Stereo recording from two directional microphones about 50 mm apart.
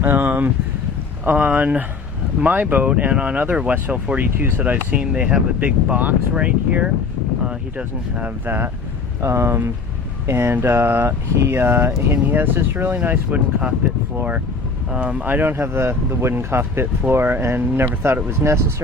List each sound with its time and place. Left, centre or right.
0.0 s speech: right
6.3 s speech: right
8.2 s speech: right
9.2 s speech: right
11.4 s speech: right
12.2 s speech: right
14.9 s speech: right
15.5 s speech: right